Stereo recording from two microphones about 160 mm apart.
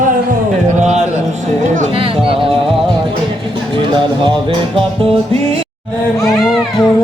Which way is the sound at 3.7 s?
30° right (ahead or behind).